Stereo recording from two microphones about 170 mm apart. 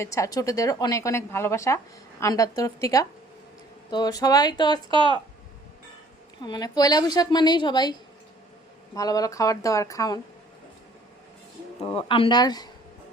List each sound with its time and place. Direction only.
0.0 s speech: 20° left (ahead or behind)
4.9 s speech: 30° right (ahead or behind)
6.4 s speech: 25° left (ahead or behind)
9.0 s speech: 20° left (ahead or behind)
11.8 s speech: 30° left (ahead or behind)